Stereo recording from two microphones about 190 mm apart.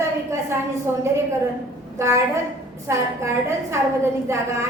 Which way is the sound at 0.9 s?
10° right (ahead or behind).